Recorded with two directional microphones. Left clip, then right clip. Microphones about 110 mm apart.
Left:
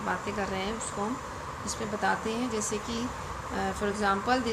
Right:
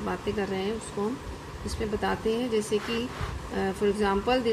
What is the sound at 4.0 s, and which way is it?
Speech, 30° right (ahead or behind).